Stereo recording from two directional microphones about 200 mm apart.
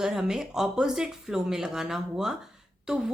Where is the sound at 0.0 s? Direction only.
Centre (ahead or behind).